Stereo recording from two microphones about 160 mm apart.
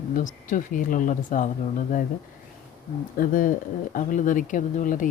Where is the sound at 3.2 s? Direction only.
60° left (ahead or behind).